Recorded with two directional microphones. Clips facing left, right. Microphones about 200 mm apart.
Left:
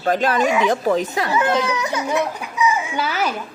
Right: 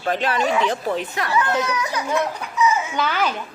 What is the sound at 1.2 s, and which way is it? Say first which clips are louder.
A child's voice: left 2 dB; 25° left (ahead or behind).